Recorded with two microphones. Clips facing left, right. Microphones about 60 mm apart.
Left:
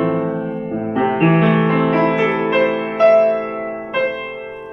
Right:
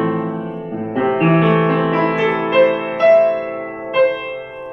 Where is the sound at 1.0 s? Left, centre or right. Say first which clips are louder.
Right 1 dB; centre.